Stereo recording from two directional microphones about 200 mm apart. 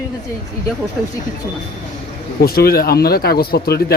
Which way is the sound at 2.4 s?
50° left (ahead or behind).